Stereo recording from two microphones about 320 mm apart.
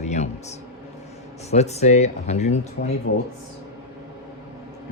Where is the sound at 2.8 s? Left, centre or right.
Left.